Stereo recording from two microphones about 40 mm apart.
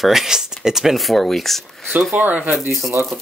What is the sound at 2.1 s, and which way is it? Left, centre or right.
Speech, right.